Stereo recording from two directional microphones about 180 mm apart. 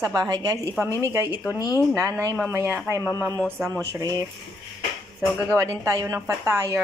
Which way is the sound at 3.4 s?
5° left (ahead or behind).